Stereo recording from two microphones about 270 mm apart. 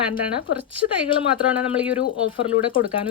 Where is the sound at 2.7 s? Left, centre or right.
Centre.